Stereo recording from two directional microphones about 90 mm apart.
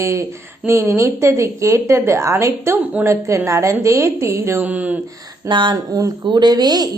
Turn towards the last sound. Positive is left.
turn(degrees=-50)  # may be behind; listen again after turning